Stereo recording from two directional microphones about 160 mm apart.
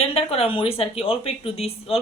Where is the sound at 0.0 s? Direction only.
40° left (ahead or behind).